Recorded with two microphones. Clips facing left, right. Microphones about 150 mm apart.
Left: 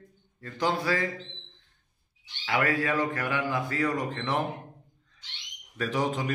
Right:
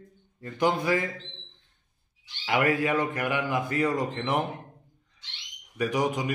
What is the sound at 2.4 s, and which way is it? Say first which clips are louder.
Speech: right 2 dB; 20° right (ahead or behind).